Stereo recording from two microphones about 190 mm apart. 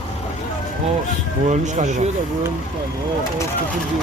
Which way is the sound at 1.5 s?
40° right (ahead or behind).